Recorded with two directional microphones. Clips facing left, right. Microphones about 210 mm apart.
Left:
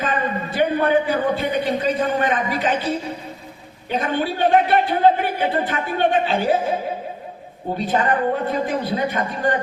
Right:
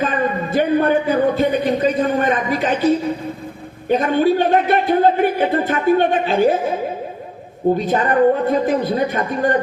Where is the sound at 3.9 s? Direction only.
45° right (ahead or behind).